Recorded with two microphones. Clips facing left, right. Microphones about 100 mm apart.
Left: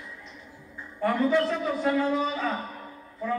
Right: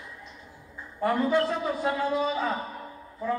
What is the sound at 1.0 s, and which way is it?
A man's voice, 15° right (ahead or behind).